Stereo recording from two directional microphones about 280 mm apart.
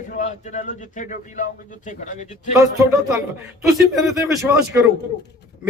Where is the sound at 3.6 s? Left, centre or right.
Centre.